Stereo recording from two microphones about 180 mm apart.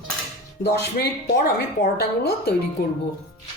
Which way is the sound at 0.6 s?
65° left (ahead or behind).